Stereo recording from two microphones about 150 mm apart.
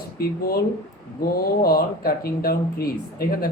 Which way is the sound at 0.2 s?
90° left.